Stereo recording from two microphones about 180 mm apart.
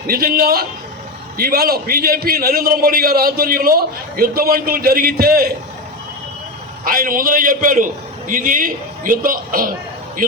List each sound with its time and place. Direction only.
0.1 s a man's voice: 55° right (ahead or behind)
6.8 s a man's voice: 50° right (ahead or behind)